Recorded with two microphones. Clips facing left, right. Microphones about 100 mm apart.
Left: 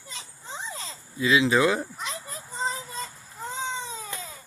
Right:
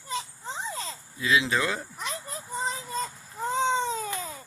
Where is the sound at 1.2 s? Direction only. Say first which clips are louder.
Left 3 dB; centre (ahead or behind).